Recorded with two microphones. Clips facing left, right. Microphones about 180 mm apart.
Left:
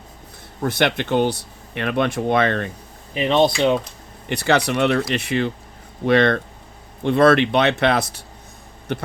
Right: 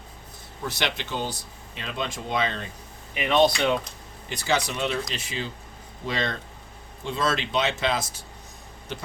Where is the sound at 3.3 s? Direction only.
25° left (ahead or behind).